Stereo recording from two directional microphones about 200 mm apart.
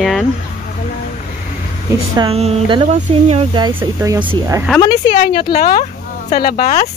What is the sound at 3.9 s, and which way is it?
Speech, 15° right (ahead or behind).